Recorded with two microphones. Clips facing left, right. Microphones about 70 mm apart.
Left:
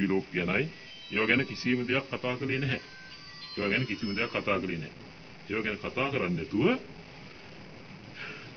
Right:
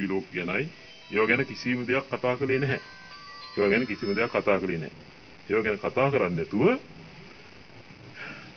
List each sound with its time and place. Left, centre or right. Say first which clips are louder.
0.0 s speech: left 1 dB; centre
1.1 s speech: right 3 dB; right